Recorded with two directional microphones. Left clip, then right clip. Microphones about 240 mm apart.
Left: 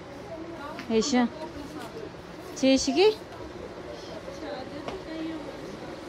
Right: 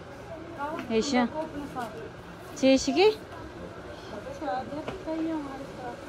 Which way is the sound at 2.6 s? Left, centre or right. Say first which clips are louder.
Even; centre.